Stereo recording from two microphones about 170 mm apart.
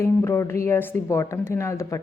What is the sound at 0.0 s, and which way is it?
A woman's voice, 15° left (ahead or behind).